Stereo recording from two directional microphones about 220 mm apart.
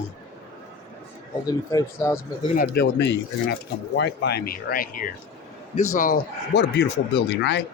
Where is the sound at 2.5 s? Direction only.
40° left (ahead or behind).